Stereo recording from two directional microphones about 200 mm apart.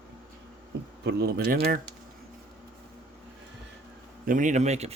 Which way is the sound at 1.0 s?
50° right (ahead or behind).